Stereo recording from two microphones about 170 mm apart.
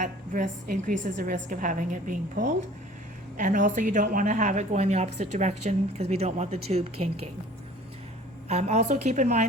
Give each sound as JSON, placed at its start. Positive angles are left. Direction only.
{"t": 0.0, "sound": "a woman's voice", "side_deg": -50}
{"t": 8.4, "sound": "speech", "side_deg": -40}